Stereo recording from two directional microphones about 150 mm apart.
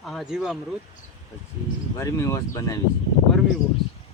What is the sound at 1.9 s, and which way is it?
Speech, 20° left (ahead or behind).